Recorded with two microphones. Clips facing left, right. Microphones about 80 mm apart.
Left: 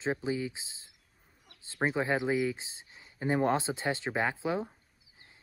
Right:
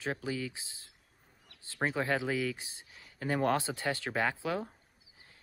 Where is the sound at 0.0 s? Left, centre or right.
Left.